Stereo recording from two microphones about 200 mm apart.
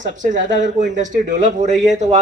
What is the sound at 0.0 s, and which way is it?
Speech, 40° right (ahead or behind).